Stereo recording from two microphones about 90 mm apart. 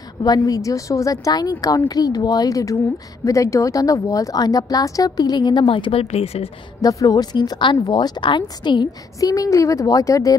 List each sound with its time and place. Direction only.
0.2 s a woman's voice: 45° left (ahead or behind); by 6.5 s 90° left
6.8 s a woman's voice: 40° left (ahead or behind); by 8.8 s 55° left (ahead or behind)
9.2 s speech: 40° left (ahead or behind)